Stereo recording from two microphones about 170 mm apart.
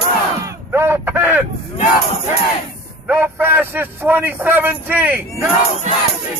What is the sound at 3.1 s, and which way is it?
A man's voice, 10° right (ahead or behind).